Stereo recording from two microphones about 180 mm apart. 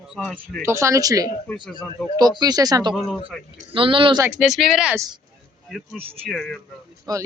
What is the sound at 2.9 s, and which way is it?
Speech, centre (ahead or behind).